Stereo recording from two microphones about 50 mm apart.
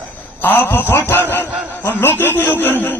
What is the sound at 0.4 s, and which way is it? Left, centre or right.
A man's voice, left.